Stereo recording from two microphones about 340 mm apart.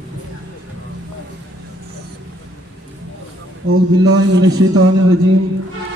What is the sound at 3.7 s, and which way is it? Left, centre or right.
Speech, right.